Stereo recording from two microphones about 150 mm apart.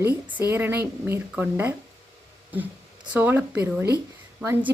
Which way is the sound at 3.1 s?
15° right (ahead or behind).